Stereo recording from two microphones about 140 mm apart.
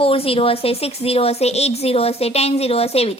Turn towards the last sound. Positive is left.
turn(degrees=45)  # may be behind; listen again after turning